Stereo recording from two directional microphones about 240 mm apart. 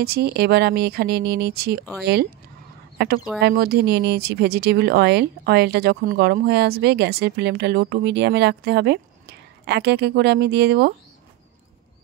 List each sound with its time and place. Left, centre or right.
0.0 s speech: right
3.0 s speech: right